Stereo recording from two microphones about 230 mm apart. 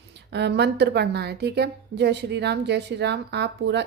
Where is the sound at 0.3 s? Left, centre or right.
Right.